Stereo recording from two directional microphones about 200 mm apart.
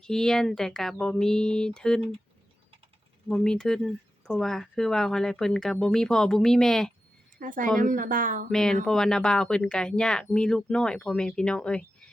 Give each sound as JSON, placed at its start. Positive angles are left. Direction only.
{"t": 0.0, "sound": "speech", "side_deg": 5}
{"t": 3.2, "sound": "speech", "side_deg": 5}
{"t": 7.3, "sound": "a woman's voice", "side_deg": -40}
{"t": 8.4, "sound": "speech", "side_deg": 5}